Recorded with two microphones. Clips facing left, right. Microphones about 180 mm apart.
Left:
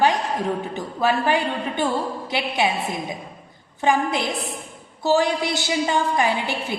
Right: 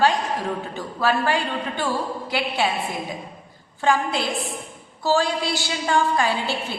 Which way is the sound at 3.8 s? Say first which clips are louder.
Left 1 dB; 20° left (ahead or behind).